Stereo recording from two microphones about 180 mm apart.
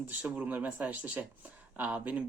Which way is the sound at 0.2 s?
10° right (ahead or behind).